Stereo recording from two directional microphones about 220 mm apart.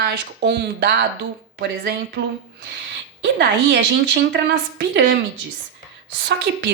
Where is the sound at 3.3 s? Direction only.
50° right (ahead or behind).